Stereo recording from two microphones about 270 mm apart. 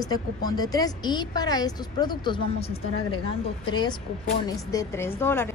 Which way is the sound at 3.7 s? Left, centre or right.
Centre.